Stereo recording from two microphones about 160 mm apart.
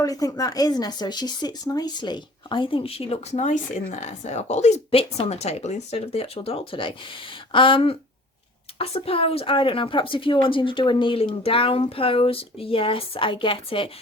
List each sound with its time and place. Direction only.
0.0 s speech: 20° left (ahead or behind)